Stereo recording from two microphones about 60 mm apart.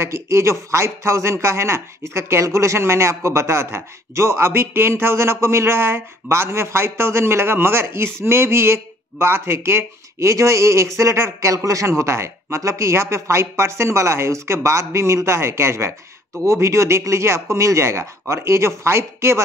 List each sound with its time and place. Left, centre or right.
0.0 s speech: right
11.5 s speech: right